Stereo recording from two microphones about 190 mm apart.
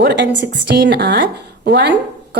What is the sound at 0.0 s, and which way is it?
A woman's voice, 65° right (ahead or behind).